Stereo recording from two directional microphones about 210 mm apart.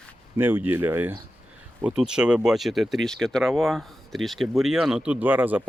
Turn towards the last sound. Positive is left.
turn(degrees=-10)  # may be behind; listen again after turning